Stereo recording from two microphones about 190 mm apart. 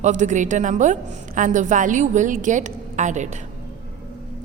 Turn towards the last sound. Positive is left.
turn(degrees=-40)  # may be behind; listen again after turning